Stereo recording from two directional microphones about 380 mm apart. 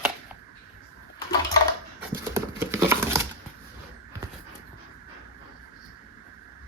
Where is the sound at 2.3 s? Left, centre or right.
Centre.